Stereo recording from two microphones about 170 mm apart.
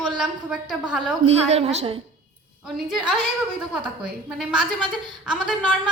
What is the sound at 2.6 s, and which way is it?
Speech, centre (ahead or behind).